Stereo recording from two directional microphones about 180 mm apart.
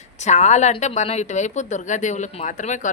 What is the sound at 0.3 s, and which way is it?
A woman's voice, 40° left (ahead or behind).